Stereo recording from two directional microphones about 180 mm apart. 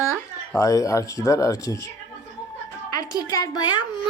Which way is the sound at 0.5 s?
20° left (ahead or behind).